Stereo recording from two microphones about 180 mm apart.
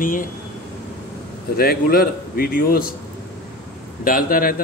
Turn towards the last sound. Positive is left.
turn(degrees=50)  # may be behind; listen again after turning